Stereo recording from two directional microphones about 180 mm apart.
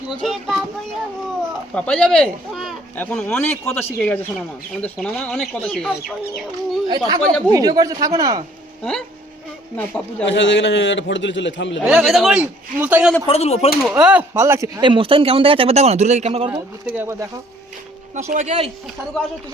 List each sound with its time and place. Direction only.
0.1 s a man's voice: centre (ahead or behind)
1.7 s a man's voice: 5° left (ahead or behind)
6.8 s speech: 25° right (ahead or behind)
9.7 s a man's voice: 5° left (ahead or behind)
10.2 s a man's voice: 80° left
11.8 s a man's voice: 5° right (ahead or behind)
13.2 s speech: 35° left (ahead or behind)
13.9 s speech: 10° right (ahead or behind); by 16.5 s 35° right (ahead or behind)
16.5 s speech: 10° right (ahead or behind)
18.1 s speech: 40° right (ahead or behind)